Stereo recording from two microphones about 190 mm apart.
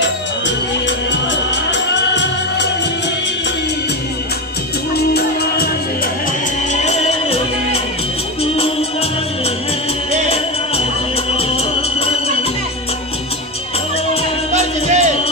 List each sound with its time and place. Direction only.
0.8 s music: 70° left (ahead or behind)
4.9 s music: 55° left (ahead or behind)
6.7 s music: 35° left (ahead or behind)
14.5 s music: 35° right (ahead or behind)